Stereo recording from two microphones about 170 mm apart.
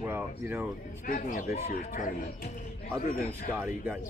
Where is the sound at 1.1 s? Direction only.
50° left (ahead or behind).